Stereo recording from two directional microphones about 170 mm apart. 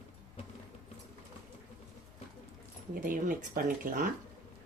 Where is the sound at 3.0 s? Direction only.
50° right (ahead or behind).